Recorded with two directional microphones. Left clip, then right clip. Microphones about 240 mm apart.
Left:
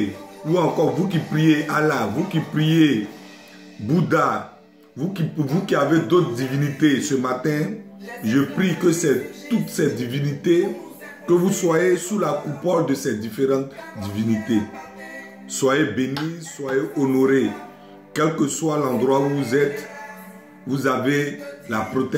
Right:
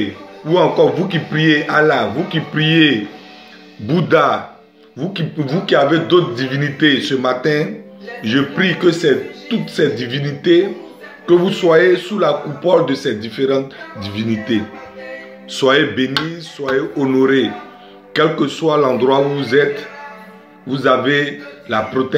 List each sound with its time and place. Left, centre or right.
0.5 s speech: centre